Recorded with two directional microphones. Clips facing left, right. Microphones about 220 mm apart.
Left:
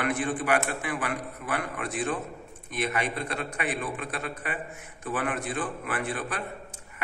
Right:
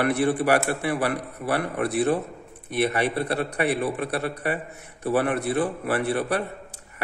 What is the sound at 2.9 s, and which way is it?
A man's voice, 35° right (ahead or behind).